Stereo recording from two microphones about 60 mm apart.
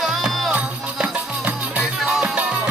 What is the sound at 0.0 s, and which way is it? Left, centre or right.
Music, centre.